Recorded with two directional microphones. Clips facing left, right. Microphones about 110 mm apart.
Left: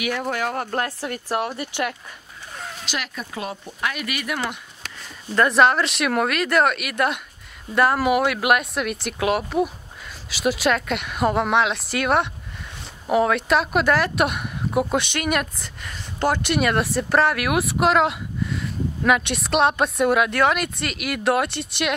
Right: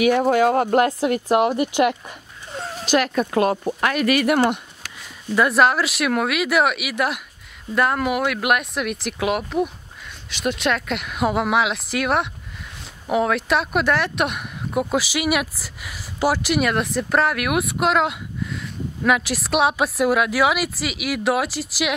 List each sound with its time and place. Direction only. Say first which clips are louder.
0.2 s speech: right 9 dB; 20° right (ahead or behind)
2.8 s speech: right 13 dB; 45° right (ahead or behind)
5.3 s speech: even; 5° right (ahead or behind)